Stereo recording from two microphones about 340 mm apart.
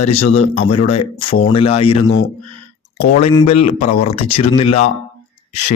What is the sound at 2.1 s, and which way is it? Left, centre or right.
Speech, left.